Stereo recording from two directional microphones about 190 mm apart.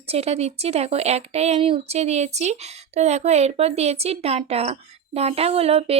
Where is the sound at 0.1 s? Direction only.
35° right (ahead or behind).